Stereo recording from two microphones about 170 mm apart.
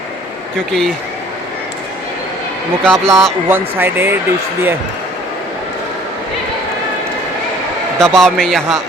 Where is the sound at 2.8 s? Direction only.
5° left (ahead or behind).